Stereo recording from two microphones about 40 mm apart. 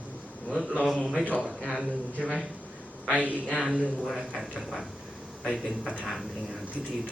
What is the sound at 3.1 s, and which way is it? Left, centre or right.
Speech, right.